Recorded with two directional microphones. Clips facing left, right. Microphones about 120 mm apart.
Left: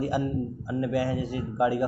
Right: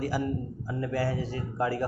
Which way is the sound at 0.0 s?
20° left (ahead or behind).